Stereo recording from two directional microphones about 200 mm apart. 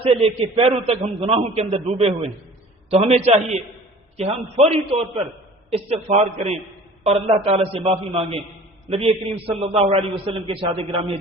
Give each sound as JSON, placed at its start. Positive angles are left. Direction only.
{"t": 0.0, "sound": "a man's voice", "side_deg": -30}